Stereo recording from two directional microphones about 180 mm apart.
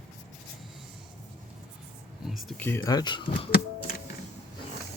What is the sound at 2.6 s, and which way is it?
Speech, 10° left (ahead or behind).